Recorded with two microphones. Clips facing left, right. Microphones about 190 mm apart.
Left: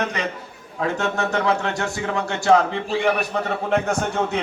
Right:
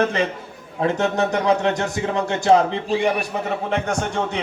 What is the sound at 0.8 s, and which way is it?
Speech, 20° right (ahead or behind).